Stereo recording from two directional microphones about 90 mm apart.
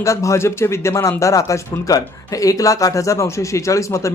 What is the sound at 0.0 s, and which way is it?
A man's voice, 35° left (ahead or behind).